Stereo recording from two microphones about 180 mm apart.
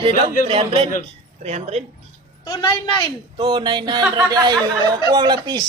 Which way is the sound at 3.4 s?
30° right (ahead or behind).